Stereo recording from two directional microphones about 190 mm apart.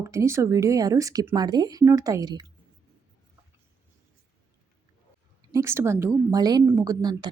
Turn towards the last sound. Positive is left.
turn(degrees=-20)  # may be behind; listen again after turning